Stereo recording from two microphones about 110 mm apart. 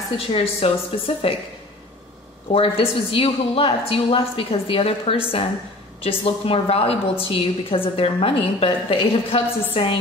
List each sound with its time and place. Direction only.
0.3 s a woman's voice: 60° left (ahead or behind)
2.5 s a woman's voice: 60° left (ahead or behind)